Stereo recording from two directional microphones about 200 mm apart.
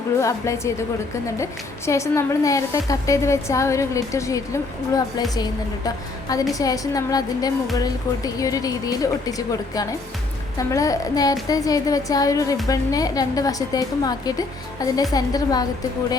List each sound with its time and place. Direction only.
0.2 s a woman's voice: 15° left (ahead or behind)
1.9 s a woman's voice: 15° left (ahead or behind)